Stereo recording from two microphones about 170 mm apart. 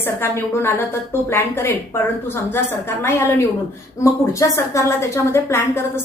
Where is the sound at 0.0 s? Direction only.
15° left (ahead or behind).